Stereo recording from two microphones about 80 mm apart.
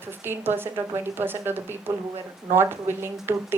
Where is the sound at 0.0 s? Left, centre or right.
Right.